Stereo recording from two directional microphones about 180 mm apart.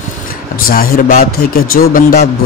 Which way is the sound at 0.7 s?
50° left (ahead or behind).